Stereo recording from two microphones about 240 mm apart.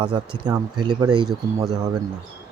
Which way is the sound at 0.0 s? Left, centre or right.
Centre.